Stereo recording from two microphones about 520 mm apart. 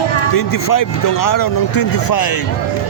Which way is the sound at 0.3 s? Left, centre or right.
Left.